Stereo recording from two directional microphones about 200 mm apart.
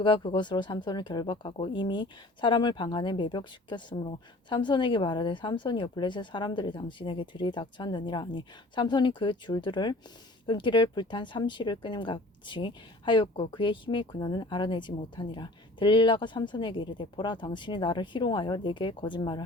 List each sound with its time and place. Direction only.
0.0 s speech: 25° left (ahead or behind)